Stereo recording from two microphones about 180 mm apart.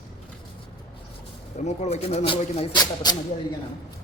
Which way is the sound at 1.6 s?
40° left (ahead or behind).